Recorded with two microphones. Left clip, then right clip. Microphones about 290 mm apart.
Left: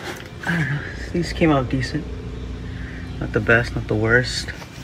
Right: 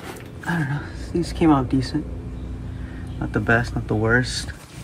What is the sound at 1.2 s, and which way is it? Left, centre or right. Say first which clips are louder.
Speech: even; centre.